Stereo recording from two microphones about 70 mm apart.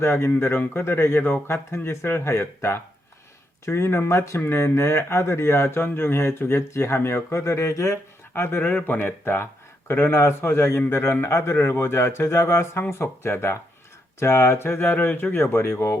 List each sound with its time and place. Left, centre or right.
0.0 s speech: left
8.3 s speech: left